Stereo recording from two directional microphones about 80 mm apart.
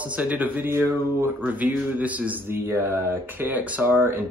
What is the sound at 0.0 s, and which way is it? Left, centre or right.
Speech, centre.